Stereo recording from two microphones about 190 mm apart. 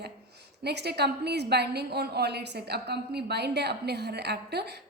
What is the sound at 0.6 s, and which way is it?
A woman's voice, 60° right (ahead or behind).